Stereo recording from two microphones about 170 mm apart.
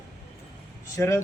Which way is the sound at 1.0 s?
15° left (ahead or behind).